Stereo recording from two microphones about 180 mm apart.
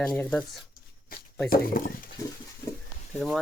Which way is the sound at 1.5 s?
55° left (ahead or behind).